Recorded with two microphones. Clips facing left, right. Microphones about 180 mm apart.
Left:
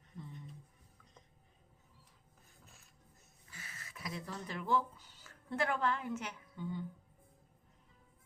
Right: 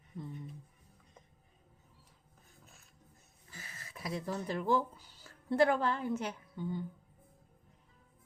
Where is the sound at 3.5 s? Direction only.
35° right (ahead or behind).